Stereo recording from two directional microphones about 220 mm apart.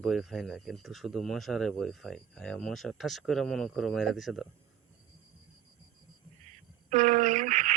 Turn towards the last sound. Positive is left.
turn(degrees=-35)  # may be behind; listen again after turning